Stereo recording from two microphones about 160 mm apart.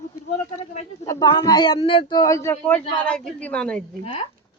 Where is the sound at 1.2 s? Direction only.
30° left (ahead or behind); by 3.8 s 5° left (ahead or behind).